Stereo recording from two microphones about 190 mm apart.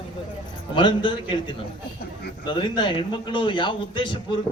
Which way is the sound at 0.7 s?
25° left (ahead or behind).